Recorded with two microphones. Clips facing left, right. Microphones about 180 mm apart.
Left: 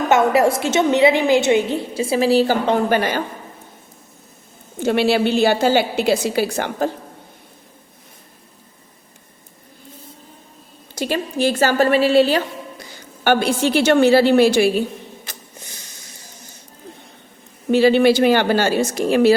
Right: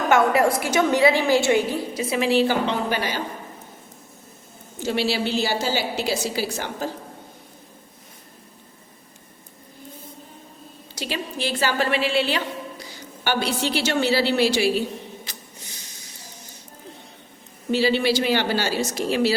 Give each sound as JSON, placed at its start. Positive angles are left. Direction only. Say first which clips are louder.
{"t": 0.1, "sound": "a woman's voice", "louder": "left 3 dB", "side_deg": 25}
{"t": 4.8, "sound": "a woman's voice", "louder": "left 7 dB", "side_deg": 60}
{"t": 10.9, "sound": "a woman's voice", "louder": "left 8 dB", "side_deg": 45}
{"t": 13.2, "sound": "a woman's voice", "louder": "left 7 dB", "side_deg": 50}
{"t": 17.7, "sound": "a woman's voice", "louder": "left 7 dB", "side_deg": 55}